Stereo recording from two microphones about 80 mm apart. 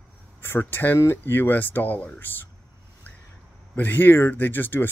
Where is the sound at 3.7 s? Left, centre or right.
Left.